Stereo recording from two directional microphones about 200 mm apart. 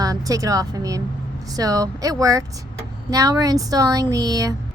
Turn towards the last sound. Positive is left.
turn(degrees=-20)  # may be behind; listen again after turning